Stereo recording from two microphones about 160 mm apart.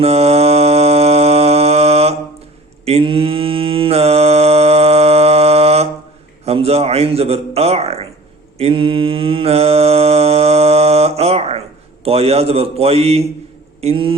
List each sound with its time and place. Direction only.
0.0 s mantra: 40° right (ahead or behind)
6.4 s a man's voice: 40° right (ahead or behind)
8.5 s mantra: 35° right (ahead or behind)
12.0 s a man's voice: 40° right (ahead or behind)